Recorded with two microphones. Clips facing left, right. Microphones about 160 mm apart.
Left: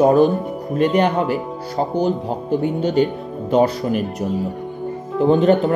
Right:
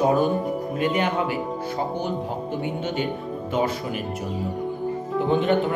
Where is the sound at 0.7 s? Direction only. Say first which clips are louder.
Left 8 dB; 40° left (ahead or behind).